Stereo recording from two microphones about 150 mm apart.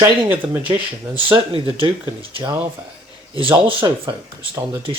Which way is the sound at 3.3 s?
35° right (ahead or behind).